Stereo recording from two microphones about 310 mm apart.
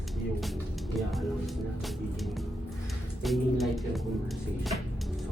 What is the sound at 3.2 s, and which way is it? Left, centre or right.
Speech, centre.